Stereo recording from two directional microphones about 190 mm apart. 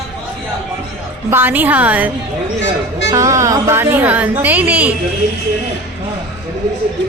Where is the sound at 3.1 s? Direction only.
15° right (ahead or behind).